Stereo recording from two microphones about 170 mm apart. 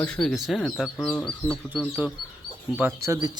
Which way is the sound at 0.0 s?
5° left (ahead or behind).